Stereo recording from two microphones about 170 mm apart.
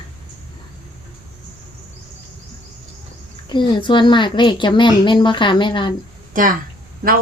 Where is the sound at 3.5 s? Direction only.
30° left (ahead or behind).